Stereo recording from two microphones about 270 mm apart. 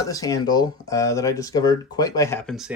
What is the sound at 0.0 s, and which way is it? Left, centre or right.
Speech, centre.